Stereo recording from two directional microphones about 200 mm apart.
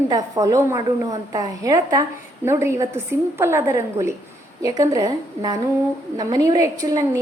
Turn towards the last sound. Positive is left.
turn(degrees=-15)  # may be behind; listen again after turning